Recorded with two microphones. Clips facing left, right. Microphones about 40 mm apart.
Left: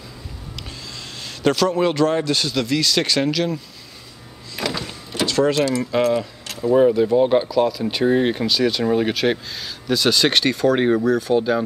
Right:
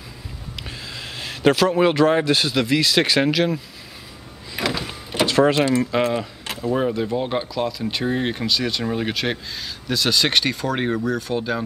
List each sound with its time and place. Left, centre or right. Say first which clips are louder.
0.7 s speech: right 2 dB; centre
4.6 s power windows: right 1 dB; centre
5.1 s speech: right 1 dB; centre
6.6 s speech: left 7 dB; centre